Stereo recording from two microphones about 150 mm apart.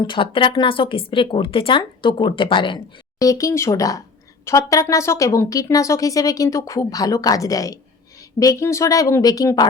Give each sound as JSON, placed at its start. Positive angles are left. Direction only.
{"t": 0.0, "sound": "speech", "side_deg": 35}